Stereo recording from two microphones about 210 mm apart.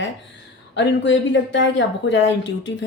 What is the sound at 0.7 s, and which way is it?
Speech, 60° left (ahead or behind).